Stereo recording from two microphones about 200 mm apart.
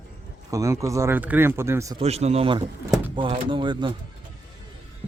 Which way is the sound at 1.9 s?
30° right (ahead or behind).